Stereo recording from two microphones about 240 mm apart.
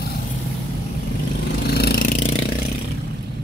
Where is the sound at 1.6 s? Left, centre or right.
Left.